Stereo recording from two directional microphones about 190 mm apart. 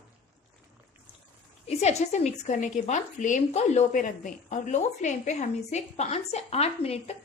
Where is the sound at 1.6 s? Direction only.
35° left (ahead or behind).